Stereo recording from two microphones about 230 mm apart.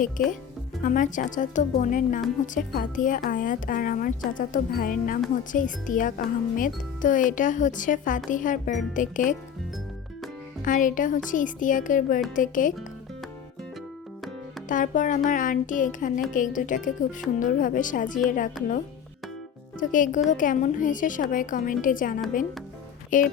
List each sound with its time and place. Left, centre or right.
0.2 s speech: left
10.6 s speech: left
14.7 s speech: left
18.6 s speech: centre
19.9 s speech: left